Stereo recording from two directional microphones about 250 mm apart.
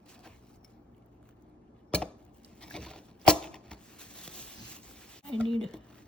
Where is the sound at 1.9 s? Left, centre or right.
Centre.